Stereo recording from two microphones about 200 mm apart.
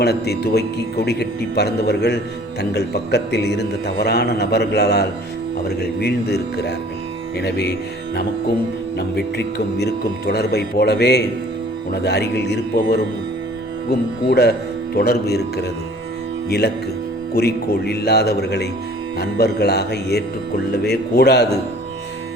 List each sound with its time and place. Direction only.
0.0 s a man's voice: 55° left (ahead or behind)
9.0 s a man's voice: 55° left (ahead or behind)
14.3 s a man's voice: 55° left (ahead or behind)